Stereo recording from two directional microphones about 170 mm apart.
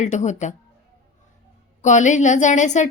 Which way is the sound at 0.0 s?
45° left (ahead or behind).